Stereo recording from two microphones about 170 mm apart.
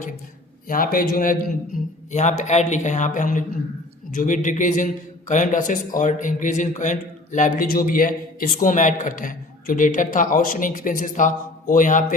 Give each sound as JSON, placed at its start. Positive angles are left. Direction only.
{"t": 0.7, "sound": "speech", "side_deg": 55}
{"t": 2.1, "sound": "a man's voice", "side_deg": 45}